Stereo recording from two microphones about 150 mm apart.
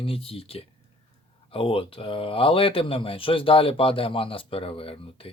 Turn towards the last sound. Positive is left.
turn(degrees=40)  # may be behind; listen again after turning